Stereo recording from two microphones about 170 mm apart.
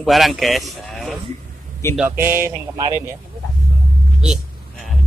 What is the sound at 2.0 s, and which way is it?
Speech, 10° right (ahead or behind).